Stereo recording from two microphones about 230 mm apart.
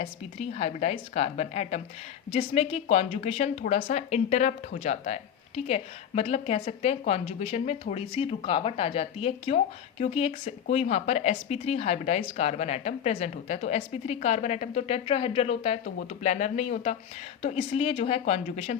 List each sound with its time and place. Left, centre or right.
0.0 s a woman's voice: left